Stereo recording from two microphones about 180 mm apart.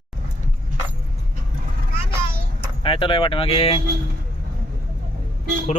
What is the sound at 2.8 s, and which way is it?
Speech, 30° left (ahead or behind).